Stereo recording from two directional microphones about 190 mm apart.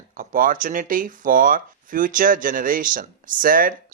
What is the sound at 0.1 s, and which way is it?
Speech, 45° right (ahead or behind).